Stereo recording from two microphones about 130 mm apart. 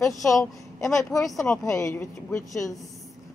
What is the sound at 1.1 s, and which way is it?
A woman's voice, 25° left (ahead or behind).